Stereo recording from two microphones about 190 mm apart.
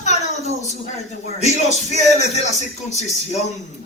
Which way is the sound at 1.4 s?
35° left (ahead or behind).